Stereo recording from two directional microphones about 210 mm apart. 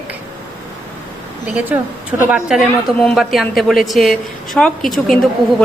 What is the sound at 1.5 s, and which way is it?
A woman's voice, 10° right (ahead or behind).